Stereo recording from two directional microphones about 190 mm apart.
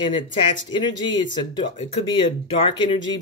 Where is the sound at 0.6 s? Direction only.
25° left (ahead or behind).